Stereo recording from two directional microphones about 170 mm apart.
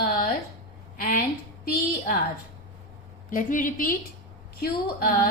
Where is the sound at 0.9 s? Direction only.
55° left (ahead or behind).